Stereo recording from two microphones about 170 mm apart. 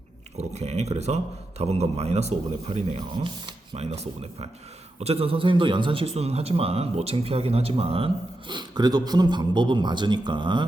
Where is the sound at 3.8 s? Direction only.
40° right (ahead or behind).